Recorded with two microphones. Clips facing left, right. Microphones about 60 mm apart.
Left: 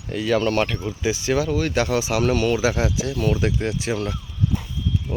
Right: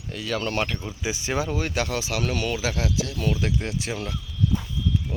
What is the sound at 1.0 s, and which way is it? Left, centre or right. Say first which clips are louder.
Speech: left 5 dB; centre.